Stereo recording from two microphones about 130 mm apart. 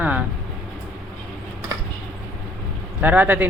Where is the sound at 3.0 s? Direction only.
10° right (ahead or behind).